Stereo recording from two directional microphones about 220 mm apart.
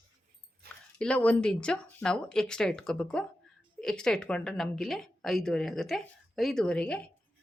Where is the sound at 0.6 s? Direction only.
45° right (ahead or behind).